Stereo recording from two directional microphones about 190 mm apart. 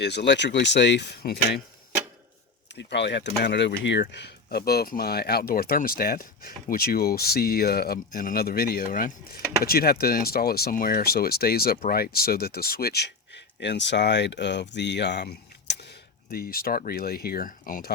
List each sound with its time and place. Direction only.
0.0 s speech: 65° left (ahead or behind)
2.7 s speech: 65° left (ahead or behind)
16.3 s speech: 55° left (ahead or behind)